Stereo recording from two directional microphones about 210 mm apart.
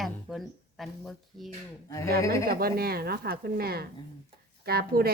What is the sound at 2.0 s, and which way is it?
Speech, 45° right (ahead or behind).